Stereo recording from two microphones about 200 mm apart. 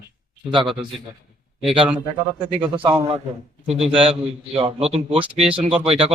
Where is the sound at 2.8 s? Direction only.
25° right (ahead or behind).